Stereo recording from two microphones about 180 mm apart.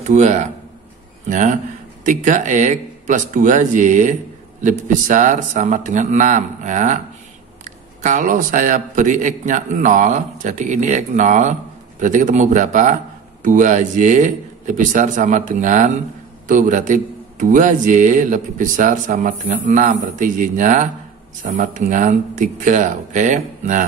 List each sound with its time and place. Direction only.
0.0 s a man's voice: 40° right (ahead or behind)